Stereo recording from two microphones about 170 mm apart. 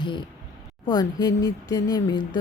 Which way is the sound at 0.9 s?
25° left (ahead or behind).